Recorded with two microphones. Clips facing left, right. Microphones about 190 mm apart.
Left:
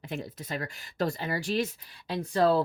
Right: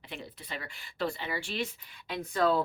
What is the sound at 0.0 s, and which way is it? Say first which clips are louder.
Speech: left 7 dB; 45° left (ahead or behind).